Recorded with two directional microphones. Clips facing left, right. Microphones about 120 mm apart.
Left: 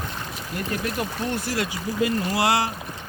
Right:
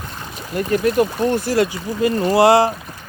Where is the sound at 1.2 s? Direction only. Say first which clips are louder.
Right 9 dB; 40° right (ahead or behind).